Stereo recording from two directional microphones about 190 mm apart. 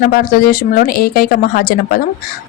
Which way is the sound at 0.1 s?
50° left (ahead or behind).